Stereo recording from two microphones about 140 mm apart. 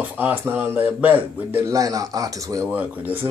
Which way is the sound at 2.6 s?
10° right (ahead or behind).